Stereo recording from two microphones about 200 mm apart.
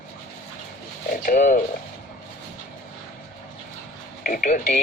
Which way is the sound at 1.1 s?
40° left (ahead or behind).